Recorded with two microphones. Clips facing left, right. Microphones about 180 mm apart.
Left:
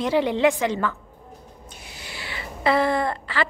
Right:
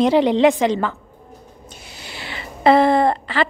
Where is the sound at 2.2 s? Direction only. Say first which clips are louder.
Right 7 dB; 25° right (ahead or behind).